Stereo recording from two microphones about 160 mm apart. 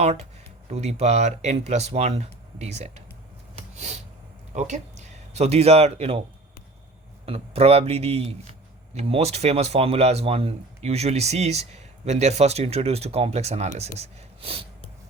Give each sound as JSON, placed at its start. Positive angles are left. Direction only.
{"t": 0.7, "sound": "speech", "side_deg": -40}
{"t": 4.5, "sound": "speech", "side_deg": -45}
{"t": 7.3, "sound": "speech", "side_deg": -35}